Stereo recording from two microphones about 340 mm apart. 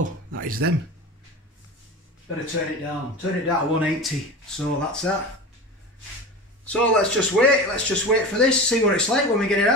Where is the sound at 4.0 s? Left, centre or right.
Centre.